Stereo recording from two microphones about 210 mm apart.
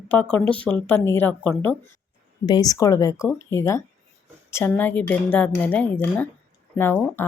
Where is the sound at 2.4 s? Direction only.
20° left (ahead or behind).